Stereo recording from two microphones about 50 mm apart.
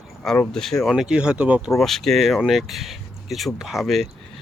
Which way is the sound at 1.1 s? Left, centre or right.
Centre.